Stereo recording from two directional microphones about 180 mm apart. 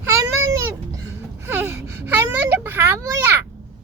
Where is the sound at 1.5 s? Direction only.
10° right (ahead or behind).